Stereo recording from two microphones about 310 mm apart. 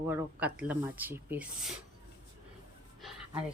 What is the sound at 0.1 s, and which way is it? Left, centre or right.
Speech, centre.